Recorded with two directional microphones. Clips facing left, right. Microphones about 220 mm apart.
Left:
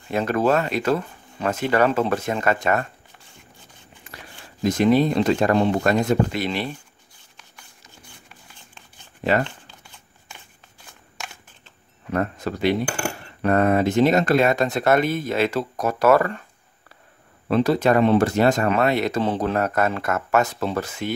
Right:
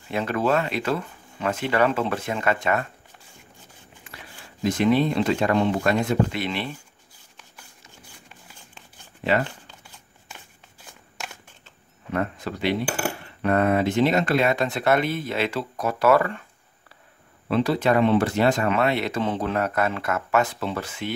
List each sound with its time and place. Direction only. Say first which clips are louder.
0.1 s speech: left 3 dB; 40° left (ahead or behind)
4.1 s a sound: left 3 dB; 40° left (ahead or behind)
4.6 s speech: left 3 dB; 40° left (ahead or behind)
9.4 s shuffling cards: left 2 dB; 5° right (ahead or behind)
12.1 s speech: left 3 dB; 40° left (ahead or behind)
17.5 s speech: left 3 dB; 45° left (ahead or behind)